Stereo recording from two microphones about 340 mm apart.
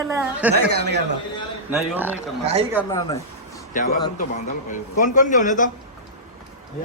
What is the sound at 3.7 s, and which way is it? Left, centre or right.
A man's voice, left.